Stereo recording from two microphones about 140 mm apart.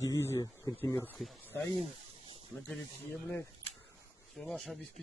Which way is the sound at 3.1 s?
20° left (ahead or behind).